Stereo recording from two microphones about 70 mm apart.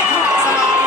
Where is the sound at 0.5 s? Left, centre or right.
Centre.